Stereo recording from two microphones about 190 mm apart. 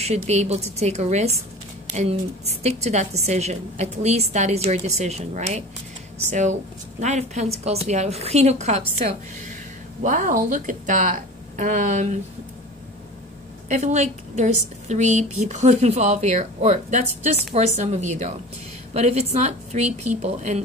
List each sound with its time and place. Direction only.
0.0 s a woman's voice: 35° right (ahead or behind)
10.0 s speech: 45° right (ahead or behind)
13.7 s a woman's voice: 40° right (ahead or behind)